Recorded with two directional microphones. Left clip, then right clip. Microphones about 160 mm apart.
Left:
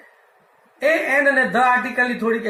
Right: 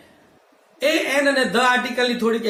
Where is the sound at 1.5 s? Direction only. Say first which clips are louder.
Left 1 dB; 20° right (ahead or behind).